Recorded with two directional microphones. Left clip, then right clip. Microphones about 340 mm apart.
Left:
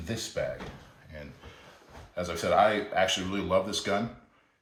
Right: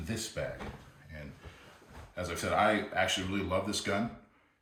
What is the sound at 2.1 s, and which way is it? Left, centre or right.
Speech, centre.